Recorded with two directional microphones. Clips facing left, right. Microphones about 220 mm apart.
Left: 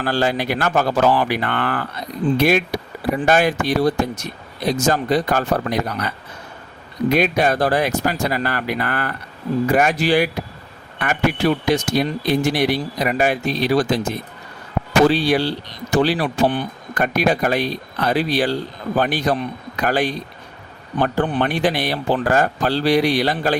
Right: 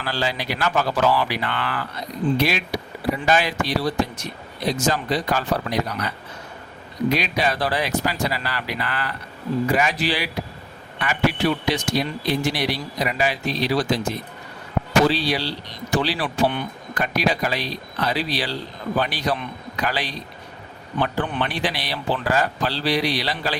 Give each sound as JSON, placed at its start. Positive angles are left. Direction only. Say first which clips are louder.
{"t": 0.0, "sound": "speech", "louder": "left 6 dB", "side_deg": 50}
{"t": 15.0, "sound": "speech", "louder": "left 5 dB", "side_deg": 50}